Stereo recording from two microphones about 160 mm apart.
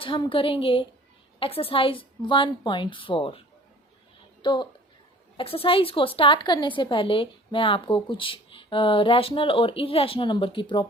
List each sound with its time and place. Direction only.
0.0 s a woman's voice: 30° left (ahead or behind)
4.4 s a woman's voice: 30° left (ahead or behind)